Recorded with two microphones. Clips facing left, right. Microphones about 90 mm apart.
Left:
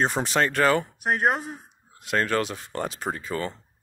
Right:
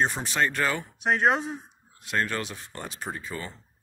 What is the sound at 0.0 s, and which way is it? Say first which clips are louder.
Speech: left 3 dB; 70° left (ahead or behind).